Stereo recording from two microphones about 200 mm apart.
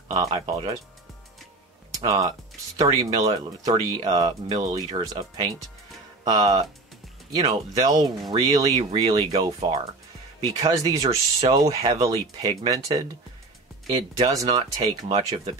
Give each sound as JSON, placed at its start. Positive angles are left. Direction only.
{"t": 0.1, "sound": "speech", "side_deg": -20}
{"t": 1.9, "sound": "speech", "side_deg": -20}
{"t": 14.2, "sound": "speech", "side_deg": -20}